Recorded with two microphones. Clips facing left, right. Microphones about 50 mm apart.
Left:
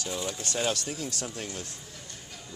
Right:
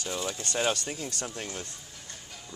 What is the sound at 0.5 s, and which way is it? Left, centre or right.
Speech, centre.